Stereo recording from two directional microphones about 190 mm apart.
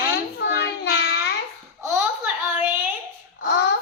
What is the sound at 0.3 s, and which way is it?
Child singing, 65° left (ahead or behind).